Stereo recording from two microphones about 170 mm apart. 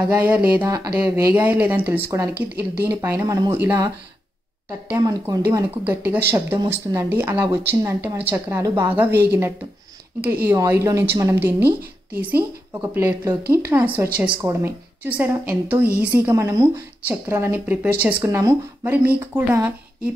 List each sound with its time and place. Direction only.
0.1 s a woman's voice: 10° right (ahead or behind)